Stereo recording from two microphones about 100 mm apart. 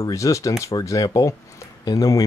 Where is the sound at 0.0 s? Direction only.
35° left (ahead or behind).